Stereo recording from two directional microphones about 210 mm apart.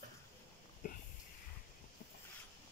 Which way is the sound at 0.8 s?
40° left (ahead or behind).